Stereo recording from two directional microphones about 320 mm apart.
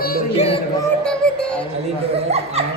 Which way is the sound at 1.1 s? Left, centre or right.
Centre.